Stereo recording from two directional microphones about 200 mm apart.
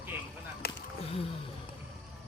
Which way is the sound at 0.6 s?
50° left (ahead or behind).